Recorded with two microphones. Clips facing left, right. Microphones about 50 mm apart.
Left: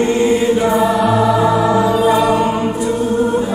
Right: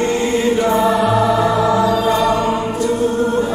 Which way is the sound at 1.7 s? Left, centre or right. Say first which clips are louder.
Left 2 dB; centre.